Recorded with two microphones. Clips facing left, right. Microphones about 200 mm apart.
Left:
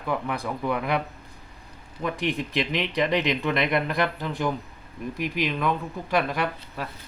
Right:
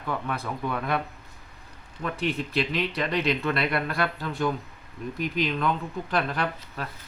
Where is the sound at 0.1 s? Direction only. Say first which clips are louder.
Left 3 dB; 15° left (ahead or behind).